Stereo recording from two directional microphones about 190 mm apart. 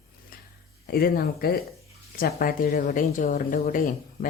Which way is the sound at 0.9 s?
55° left (ahead or behind).